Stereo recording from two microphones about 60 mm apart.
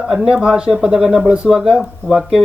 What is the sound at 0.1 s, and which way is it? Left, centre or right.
Speech, centre.